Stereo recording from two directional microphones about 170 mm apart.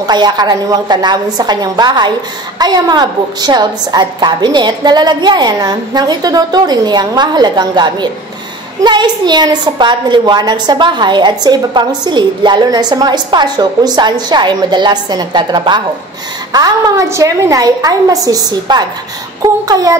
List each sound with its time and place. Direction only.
0.0 s a woman's voice: 25° right (ahead or behind)